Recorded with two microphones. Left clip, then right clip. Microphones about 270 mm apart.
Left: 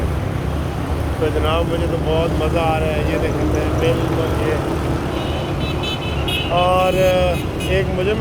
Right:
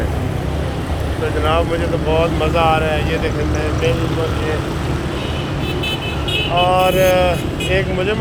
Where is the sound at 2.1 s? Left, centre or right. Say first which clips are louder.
Right 4 dB; centre.